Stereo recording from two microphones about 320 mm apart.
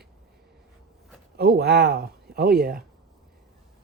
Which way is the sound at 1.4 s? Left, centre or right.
Right.